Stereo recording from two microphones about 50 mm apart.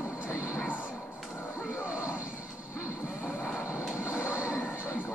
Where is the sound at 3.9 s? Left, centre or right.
Right.